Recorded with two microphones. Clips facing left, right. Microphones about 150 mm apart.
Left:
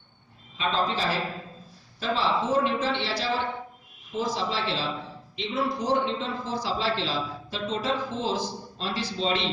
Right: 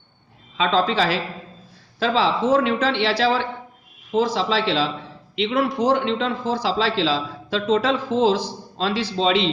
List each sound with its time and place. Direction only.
0.5 s a man's voice: 90° right
5.4 s a man's voice: 70° right (ahead or behind); by 9.5 s 90° right